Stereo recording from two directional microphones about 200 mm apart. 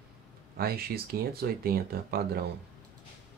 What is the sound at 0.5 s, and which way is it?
Speech, 50° right (ahead or behind).